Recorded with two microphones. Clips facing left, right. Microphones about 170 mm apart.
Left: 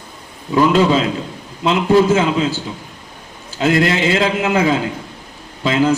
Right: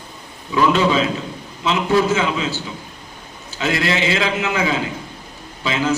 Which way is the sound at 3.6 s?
50° left (ahead or behind).